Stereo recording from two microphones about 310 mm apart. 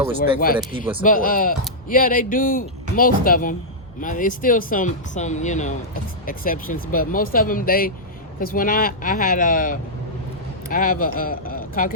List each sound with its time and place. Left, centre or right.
1.0 s speech: left